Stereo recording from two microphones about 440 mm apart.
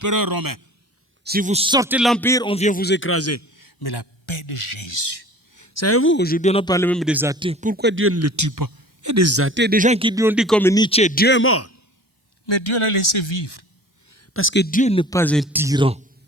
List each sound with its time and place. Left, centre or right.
0.0 s a man's voice: right
1.2 s a man's voice: centre; by 5.3 s left
5.5 s a man's voice: left
12.5 s speech: left
14.1 s speech: left; by 16.0 s centre